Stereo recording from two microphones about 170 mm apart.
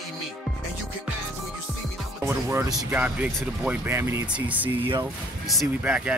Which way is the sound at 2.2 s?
15° right (ahead or behind).